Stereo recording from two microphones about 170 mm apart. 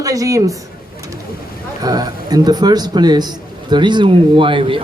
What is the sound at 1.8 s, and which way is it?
A man's voice, 20° right (ahead or behind).